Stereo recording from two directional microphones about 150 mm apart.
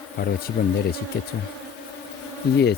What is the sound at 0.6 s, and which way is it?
Speech, 90° left.